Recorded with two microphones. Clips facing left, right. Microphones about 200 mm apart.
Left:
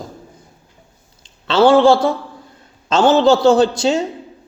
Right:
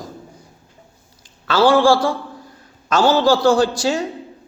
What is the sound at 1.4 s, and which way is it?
Speech, 25° left (ahead or behind).